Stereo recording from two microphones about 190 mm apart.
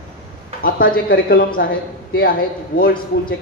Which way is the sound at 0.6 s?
50° left (ahead or behind).